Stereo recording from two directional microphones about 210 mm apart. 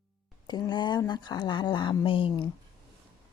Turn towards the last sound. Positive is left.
turn(degrees=25)  # may be behind; listen again after turning